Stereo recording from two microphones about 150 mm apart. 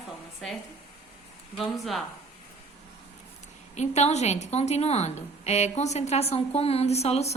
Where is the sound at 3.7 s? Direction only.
50° left (ahead or behind).